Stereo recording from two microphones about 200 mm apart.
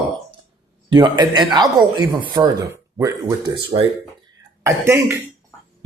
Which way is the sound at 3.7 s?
25° right (ahead or behind).